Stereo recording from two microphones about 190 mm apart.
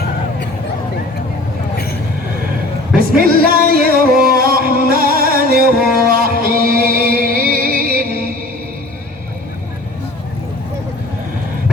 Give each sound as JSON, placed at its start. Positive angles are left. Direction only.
{"t": 3.2, "sound": "music", "side_deg": -50}